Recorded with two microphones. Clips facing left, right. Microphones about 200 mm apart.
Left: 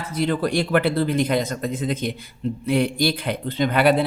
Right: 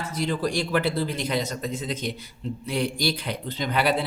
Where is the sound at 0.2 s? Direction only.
60° left (ahead or behind).